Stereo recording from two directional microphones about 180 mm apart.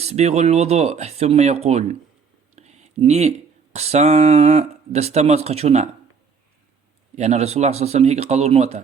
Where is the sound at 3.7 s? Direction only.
35° right (ahead or behind).